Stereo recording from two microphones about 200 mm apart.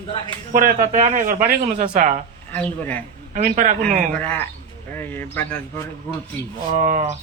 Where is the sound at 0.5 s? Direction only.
40° right (ahead or behind).